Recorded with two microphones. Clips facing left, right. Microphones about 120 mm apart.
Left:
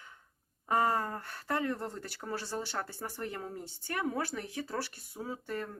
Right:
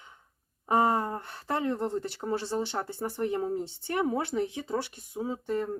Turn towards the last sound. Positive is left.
turn(degrees=-20)  # may be behind; listen again after turning